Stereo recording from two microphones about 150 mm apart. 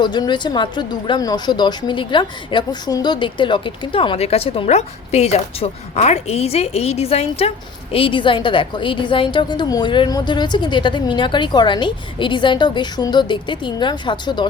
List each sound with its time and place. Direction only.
0.0 s speech: 30° left (ahead or behind)